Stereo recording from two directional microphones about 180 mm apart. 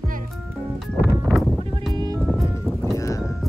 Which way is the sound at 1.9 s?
20° right (ahead or behind).